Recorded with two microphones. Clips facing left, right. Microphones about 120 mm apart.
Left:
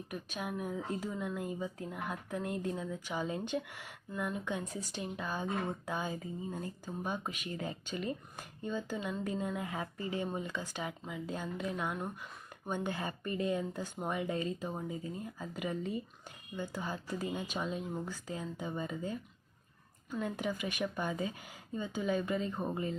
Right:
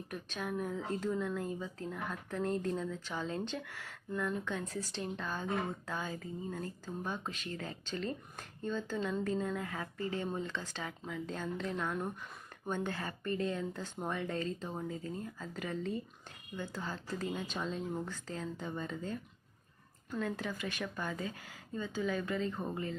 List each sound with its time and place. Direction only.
0.1 s speech: 10° left (ahead or behind)